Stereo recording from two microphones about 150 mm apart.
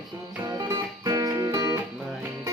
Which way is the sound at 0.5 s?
25° right (ahead or behind).